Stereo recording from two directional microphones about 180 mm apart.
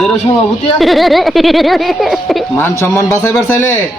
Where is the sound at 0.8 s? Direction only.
Centre (ahead or behind).